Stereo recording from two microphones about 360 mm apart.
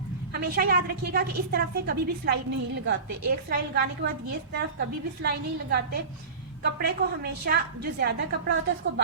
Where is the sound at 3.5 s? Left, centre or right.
Right.